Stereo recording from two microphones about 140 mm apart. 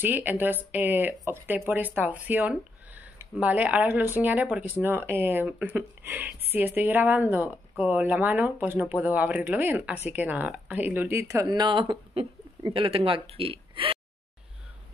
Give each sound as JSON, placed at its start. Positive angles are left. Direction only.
{"t": 0.0, "sound": "speech", "side_deg": -15}